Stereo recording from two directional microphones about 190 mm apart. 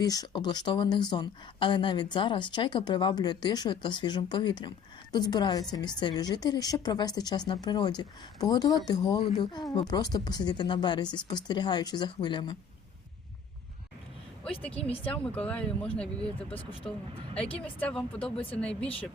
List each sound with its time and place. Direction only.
0.0 s a woman's voice: 20° left (ahead or behind)
14.6 s speech: 5° left (ahead or behind)
14.8 s a woman's voice: 30° left (ahead or behind)
15.1 s speech: 5° left (ahead or behind)
16.5 s a woman's voice: 30° left (ahead or behind)
17.7 s speech: 5° left (ahead or behind)